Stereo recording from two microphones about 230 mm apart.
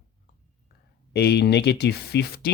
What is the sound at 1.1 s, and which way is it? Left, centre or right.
Speech, left.